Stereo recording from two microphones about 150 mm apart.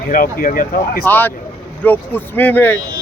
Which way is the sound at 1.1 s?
15° left (ahead or behind).